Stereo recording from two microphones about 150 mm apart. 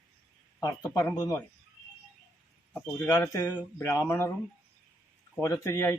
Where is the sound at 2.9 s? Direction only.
20° left (ahead or behind).